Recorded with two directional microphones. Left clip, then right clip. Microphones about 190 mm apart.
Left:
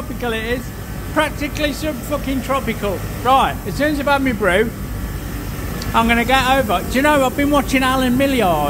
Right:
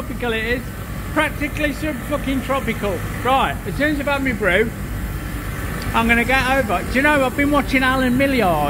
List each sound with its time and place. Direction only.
0.2 s speech: 5° left (ahead or behind)
4.0 s speech: 25° left (ahead or behind)
5.9 s speech: 10° left (ahead or behind)